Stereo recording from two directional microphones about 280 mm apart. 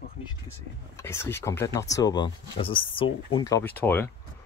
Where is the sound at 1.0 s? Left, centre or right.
Centre.